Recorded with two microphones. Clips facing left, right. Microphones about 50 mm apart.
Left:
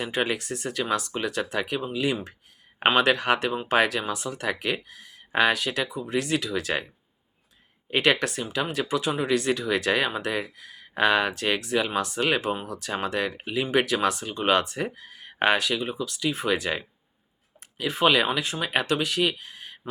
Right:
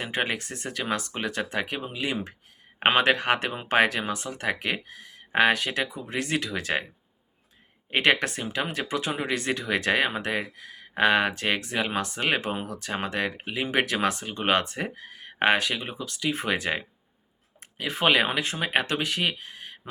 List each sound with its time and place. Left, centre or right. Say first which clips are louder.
0.0 s speech: left 2 dB; right
7.9 s speech: even; right